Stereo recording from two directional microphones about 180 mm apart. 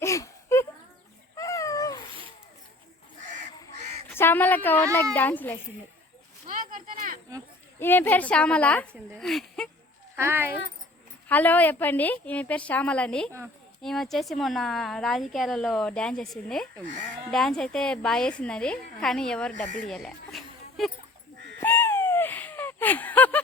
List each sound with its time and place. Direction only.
0.0 s a sound: 15° left (ahead or behind)
1.4 s cat: 20° left (ahead or behind)
4.1 s a woman's voice: 10° left (ahead or behind)
6.5 s a sound: 45° right (ahead or behind)
7.8 s a woman's voice: 10° left (ahead or behind)
10.2 s speech: 15° right (ahead or behind)
11.3 s a woman's voice: 10° left (ahead or behind)
16.8 s speech: 45° right (ahead or behind)
17.3 s speech: centre (ahead or behind)
19.9 s a sound: centre (ahead or behind)
21.6 s owl: 10° left (ahead or behind)